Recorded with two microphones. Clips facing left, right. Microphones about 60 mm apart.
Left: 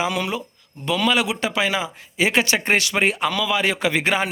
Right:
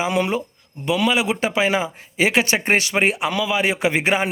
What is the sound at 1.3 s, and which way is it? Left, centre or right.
A man's voice, right.